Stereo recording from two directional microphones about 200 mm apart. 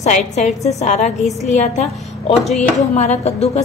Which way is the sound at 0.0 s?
35° left (ahead or behind).